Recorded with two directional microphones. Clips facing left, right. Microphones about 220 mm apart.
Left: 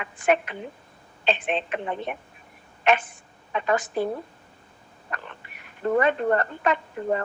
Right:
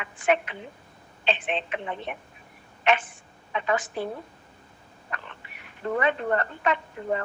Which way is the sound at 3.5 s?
45° left (ahead or behind).